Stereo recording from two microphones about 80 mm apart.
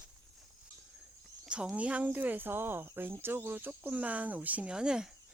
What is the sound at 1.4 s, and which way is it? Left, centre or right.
Speech, centre.